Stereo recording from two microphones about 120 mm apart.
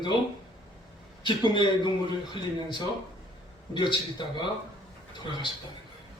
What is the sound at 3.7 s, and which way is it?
Speech, 40° left (ahead or behind).